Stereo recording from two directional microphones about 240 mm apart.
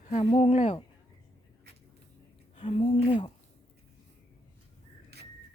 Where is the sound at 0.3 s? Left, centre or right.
Left.